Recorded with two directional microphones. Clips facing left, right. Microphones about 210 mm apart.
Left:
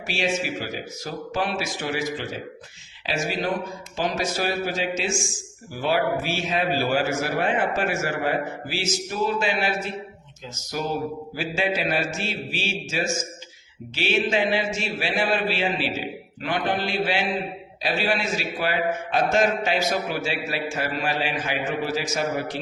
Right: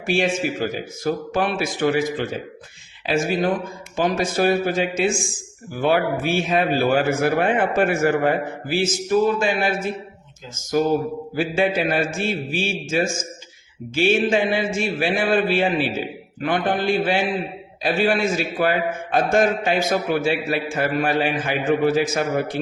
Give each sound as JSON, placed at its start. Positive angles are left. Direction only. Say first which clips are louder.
{"t": 0.1, "sound": "a man's voice", "louder": "right 5 dB", "side_deg": -50}